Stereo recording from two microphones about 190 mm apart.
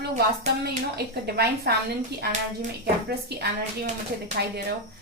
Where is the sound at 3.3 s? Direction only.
60° right (ahead or behind).